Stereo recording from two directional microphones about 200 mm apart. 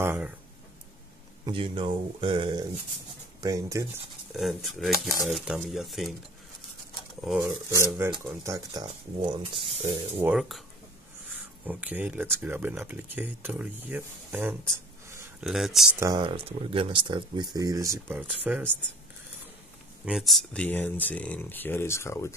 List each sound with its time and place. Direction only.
0.0 s speech: 10° right (ahead or behind)
1.4 s speech: 25° right (ahead or behind)
4.4 s speech: centre (ahead or behind)
7.2 s speech: 10° right (ahead or behind); by 9.8 s 25° right (ahead or behind)
10.1 s speech: 5° right (ahead or behind)
15.4 s speech: centre (ahead or behind)
16.0 s speech: 20° right (ahead or behind)
20.1 s speech: centre (ahead or behind)